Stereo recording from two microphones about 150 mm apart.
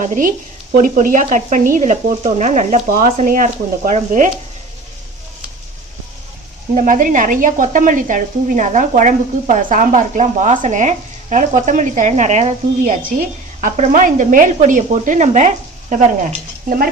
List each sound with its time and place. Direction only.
0.0 s speech: 60° right (ahead or behind)
6.7 s speech: 60° right (ahead or behind)
16.6 s stir: 75° right (ahead or behind)